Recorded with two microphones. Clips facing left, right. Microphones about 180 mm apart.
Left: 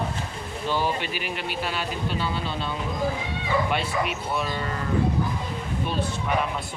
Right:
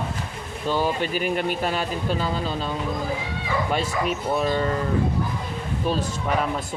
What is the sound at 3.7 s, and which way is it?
Speech, 40° right (ahead or behind).